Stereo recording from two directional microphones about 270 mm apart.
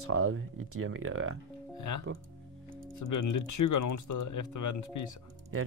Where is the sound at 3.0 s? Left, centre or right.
Left.